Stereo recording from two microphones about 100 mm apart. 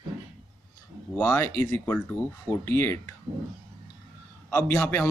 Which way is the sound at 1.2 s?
30° left (ahead or behind).